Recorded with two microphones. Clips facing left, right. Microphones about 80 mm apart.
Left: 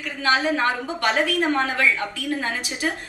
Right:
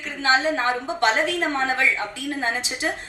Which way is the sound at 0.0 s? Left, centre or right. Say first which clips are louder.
Right 1 dB; right.